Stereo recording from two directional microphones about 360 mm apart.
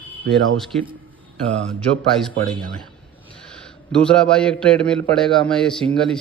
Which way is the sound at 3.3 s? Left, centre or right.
Centre.